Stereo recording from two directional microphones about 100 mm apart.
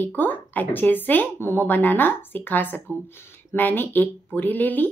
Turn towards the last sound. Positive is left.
turn(degrees=15)  # may be behind; listen again after turning